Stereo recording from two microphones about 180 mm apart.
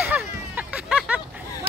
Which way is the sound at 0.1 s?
5° right (ahead or behind).